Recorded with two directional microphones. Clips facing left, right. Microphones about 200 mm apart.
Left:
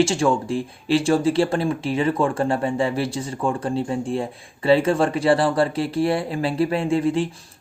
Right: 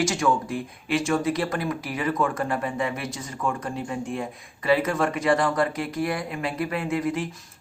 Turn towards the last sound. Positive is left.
turn(degrees=30)  # may be behind; listen again after turning